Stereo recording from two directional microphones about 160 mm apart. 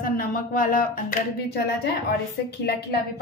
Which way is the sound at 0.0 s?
60° left (ahead or behind).